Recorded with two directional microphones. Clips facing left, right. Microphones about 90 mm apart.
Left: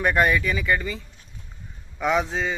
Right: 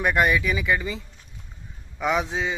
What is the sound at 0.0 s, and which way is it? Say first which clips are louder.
Speech: left 1 dB; 10° right (ahead or behind).